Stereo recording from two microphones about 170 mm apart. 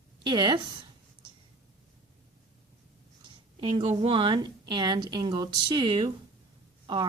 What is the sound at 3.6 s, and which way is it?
Speech, 35° right (ahead or behind).